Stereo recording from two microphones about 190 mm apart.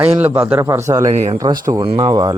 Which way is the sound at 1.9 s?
30° right (ahead or behind).